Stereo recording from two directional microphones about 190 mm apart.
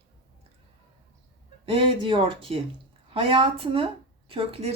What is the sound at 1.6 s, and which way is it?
A woman's voice, 30° right (ahead or behind).